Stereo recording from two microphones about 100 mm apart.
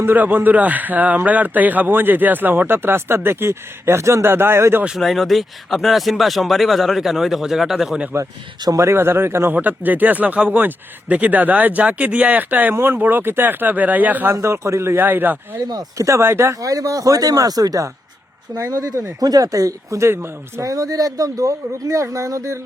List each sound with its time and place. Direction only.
0.0 s a man's voice: 20° right (ahead or behind)
4.9 s speech: centre (ahead or behind)
8.6 s speech: 30° right (ahead or behind)
14.3 s a man's voice: 30° right (ahead or behind)
15.6 s speech: 40° right (ahead or behind)